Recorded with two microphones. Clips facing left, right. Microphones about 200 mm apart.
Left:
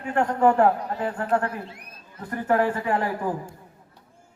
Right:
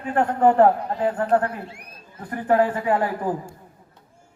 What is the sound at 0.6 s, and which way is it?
Speech, 35° right (ahead or behind).